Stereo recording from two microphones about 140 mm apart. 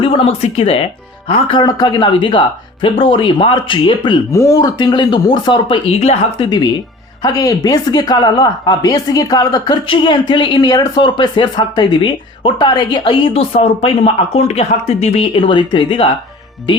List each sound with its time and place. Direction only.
0.0 s speech: 40° left (ahead or behind)
4.3 s speech: 20° left (ahead or behind); by 6.5 s 45° left (ahead or behind)
7.2 s a woman's voice: 25° left (ahead or behind)